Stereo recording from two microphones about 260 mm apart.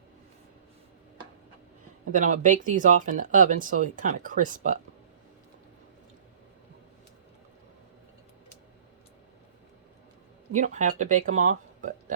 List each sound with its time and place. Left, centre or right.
2.1 s speech: right
10.5 s speech: right